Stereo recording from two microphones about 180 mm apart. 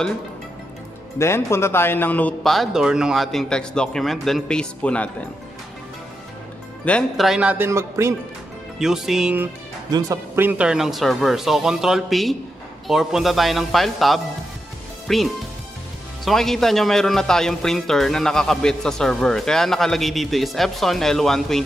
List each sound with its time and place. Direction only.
1.1 s a man's voice: 15° left (ahead or behind)
6.8 s speech: 5° left (ahead or behind); by 8.1 s 15° right (ahead or behind)
8.7 s a man's voice: 5° right (ahead or behind)
9.8 s a man's voice: 20° right (ahead or behind); by 15.2 s centre (ahead or behind)
16.3 s a man's voice: centre (ahead or behind)